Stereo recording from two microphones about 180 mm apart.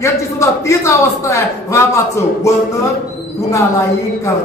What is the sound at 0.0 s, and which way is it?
A man's voice, 15° left (ahead or behind).